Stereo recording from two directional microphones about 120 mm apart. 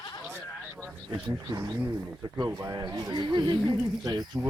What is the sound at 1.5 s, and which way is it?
Speech, 25° right (ahead or behind).